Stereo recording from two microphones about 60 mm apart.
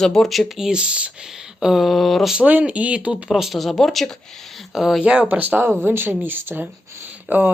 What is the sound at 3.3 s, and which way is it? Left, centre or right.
Speech, centre.